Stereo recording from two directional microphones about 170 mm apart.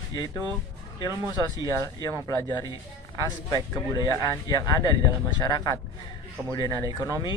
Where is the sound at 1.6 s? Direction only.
20° left (ahead or behind).